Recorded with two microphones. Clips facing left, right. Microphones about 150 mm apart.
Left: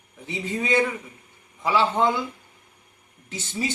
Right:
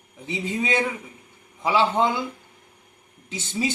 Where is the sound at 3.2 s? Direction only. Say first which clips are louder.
Right 2 dB; 20° right (ahead or behind).